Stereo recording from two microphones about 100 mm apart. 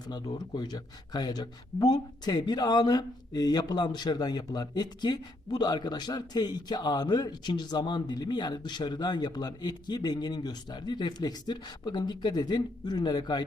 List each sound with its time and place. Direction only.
0.3 s a man's voice: 45° left (ahead or behind)